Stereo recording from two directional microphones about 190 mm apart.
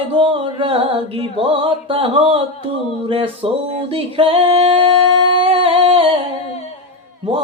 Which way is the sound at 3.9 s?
30° right (ahead or behind).